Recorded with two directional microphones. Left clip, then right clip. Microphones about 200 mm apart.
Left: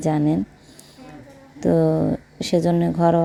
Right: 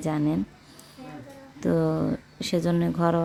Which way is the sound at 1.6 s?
15° left (ahead or behind).